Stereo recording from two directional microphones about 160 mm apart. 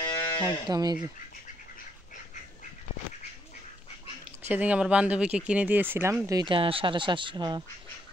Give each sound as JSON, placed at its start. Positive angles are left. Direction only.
{"t": 0.0, "sound": "livestock", "side_deg": 25}
{"t": 0.7, "sound": "speech", "side_deg": -25}
{"t": 4.5, "sound": "speech", "side_deg": -10}